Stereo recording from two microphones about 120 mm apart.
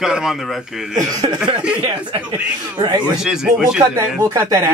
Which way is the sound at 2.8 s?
35° right (ahead or behind).